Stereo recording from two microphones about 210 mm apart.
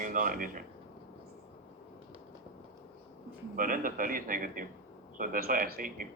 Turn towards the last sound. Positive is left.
turn(degrees=-40)  # may be behind; listen again after turning